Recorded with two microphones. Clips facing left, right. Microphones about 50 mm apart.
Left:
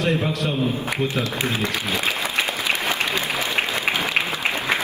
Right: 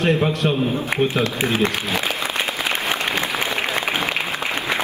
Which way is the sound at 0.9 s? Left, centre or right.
Right.